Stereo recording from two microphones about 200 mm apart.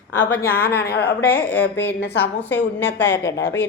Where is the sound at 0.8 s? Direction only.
50° left (ahead or behind).